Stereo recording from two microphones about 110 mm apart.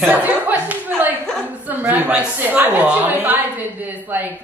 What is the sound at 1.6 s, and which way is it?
A woman's voice, 15° right (ahead or behind).